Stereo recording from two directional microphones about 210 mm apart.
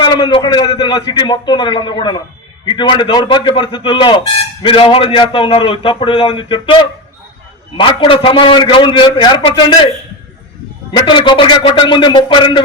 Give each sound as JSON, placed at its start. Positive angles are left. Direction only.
{"t": 0.0, "sound": "a man's voice", "side_deg": 20}
{"t": 7.8, "sound": "a man's voice", "side_deg": 25}
{"t": 10.9, "sound": "a man's voice", "side_deg": 25}